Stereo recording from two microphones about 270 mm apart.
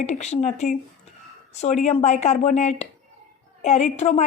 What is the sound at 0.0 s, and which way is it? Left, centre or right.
Speech, left.